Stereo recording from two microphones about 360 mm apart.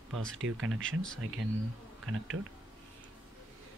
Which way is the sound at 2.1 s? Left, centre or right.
Right.